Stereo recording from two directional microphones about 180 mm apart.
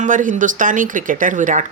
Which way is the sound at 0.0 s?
45° right (ahead or behind).